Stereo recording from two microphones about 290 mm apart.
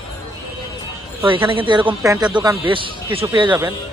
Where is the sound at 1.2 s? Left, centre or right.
Centre.